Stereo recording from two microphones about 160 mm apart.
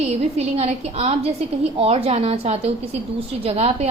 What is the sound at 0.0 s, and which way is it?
A woman's voice, 40° right (ahead or behind).